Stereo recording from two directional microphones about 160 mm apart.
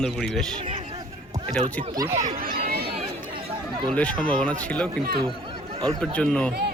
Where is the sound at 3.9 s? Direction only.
5° left (ahead or behind).